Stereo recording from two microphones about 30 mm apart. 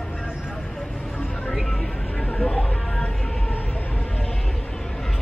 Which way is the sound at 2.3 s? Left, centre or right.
Left.